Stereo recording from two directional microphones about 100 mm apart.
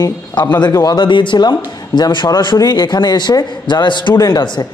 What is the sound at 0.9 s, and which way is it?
A man's voice, 55° left (ahead or behind).